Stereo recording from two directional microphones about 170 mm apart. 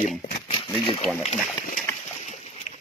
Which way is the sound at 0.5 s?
30° left (ahead or behind).